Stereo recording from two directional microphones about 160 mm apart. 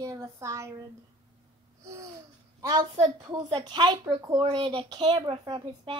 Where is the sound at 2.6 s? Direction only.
25° right (ahead or behind).